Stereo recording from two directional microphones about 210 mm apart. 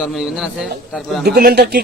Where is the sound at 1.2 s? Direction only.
50° right (ahead or behind).